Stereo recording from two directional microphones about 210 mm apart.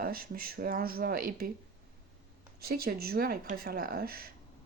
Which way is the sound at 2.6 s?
45° right (ahead or behind).